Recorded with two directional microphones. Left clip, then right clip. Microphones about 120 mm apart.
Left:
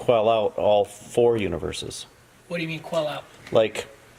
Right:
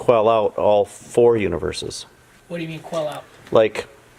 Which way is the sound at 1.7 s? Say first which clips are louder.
Right 5 dB; 50° right (ahead or behind).